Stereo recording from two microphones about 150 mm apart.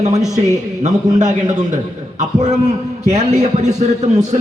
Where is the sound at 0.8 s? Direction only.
55° right (ahead or behind).